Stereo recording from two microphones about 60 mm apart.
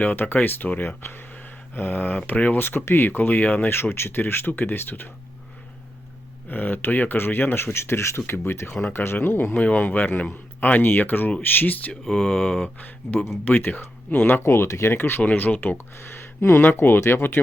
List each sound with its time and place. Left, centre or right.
0.0 s speech: left
2.6 s speech: left
3.9 s speech: left
6.5 s speech: left
9.6 s speech: left
12.0 s mantra: centre
12.6 s speech: left
14.4 s speech: left
15.2 s speech: left
16.0 s speech: left